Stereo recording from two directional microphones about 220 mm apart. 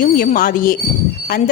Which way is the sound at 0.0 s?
40° left (ahead or behind).